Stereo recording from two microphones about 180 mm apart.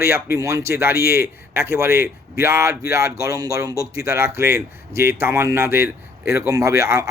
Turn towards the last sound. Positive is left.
turn(degrees=-15)  # may be behind; listen again after turning